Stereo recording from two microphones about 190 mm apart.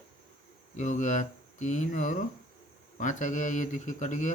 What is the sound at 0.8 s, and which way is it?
Speech, 40° left (ahead or behind).